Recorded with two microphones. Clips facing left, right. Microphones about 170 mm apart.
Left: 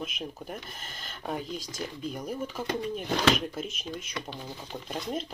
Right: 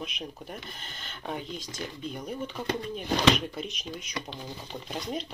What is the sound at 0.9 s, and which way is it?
Speech, 40° left (ahead or behind).